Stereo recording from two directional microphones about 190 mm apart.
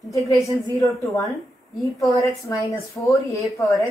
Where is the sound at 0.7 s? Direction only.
15° left (ahead or behind).